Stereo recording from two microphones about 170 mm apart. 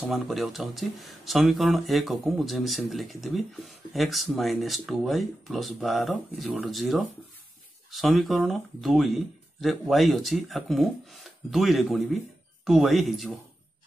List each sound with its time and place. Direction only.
0.0 s speech: centre (ahead or behind)